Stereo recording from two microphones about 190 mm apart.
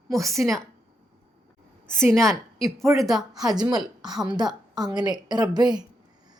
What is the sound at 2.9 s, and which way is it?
Speech, centre (ahead or behind).